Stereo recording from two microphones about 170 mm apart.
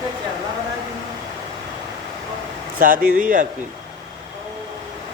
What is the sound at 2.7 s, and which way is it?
Speech, 55° right (ahead or behind).